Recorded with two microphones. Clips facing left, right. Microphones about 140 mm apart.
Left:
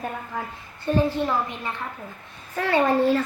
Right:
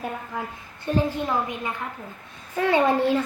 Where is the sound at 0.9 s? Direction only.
15° right (ahead or behind).